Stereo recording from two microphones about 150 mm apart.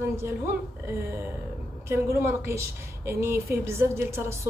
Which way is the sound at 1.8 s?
15° right (ahead or behind).